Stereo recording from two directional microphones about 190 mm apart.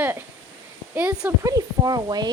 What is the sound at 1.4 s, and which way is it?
Speech, 20° right (ahead or behind).